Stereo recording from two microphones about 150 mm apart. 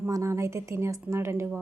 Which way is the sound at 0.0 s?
20° right (ahead or behind).